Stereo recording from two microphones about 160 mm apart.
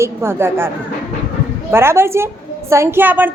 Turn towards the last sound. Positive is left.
turn(degrees=-10)  # may be behind; listen again after turning